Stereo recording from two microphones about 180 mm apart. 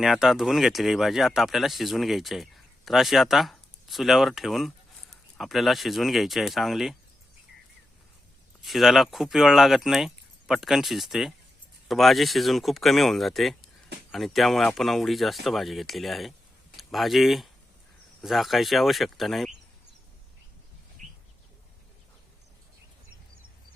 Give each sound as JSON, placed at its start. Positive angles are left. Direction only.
{"t": 0.0, "sound": "speech", "side_deg": 0}
{"t": 8.6, "sound": "speech", "side_deg": 0}
{"t": 21.0, "sound": "bird", "side_deg": -45}